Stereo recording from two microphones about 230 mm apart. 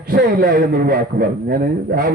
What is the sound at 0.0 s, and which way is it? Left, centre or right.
A man's voice, right.